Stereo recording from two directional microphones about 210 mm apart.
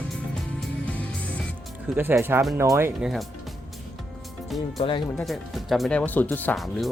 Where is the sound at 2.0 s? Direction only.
10° right (ahead or behind).